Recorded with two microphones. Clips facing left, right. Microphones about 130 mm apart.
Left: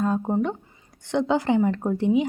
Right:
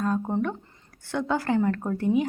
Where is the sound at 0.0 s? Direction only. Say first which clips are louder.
Left 3 dB; 15° left (ahead or behind).